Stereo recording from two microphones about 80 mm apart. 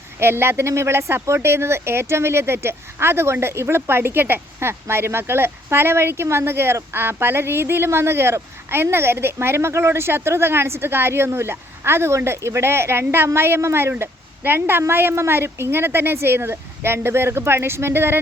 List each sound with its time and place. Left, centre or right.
0.2 s a woman's voice: right